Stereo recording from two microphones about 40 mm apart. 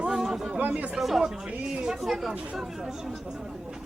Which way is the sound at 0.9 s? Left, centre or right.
Centre.